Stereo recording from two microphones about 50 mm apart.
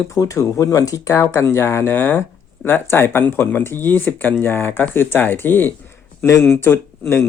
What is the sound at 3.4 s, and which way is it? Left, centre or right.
Speech, left.